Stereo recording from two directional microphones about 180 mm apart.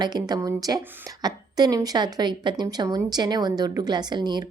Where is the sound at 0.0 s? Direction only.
20° right (ahead or behind).